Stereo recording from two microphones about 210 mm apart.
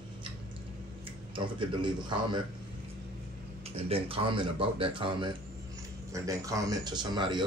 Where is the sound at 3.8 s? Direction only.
25° right (ahead or behind).